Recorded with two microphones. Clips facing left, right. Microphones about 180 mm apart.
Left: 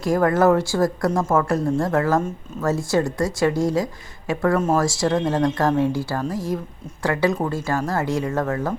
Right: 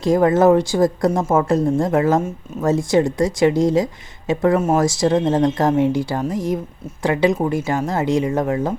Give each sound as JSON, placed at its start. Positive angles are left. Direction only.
{"t": 0.0, "sound": "speech", "side_deg": -20}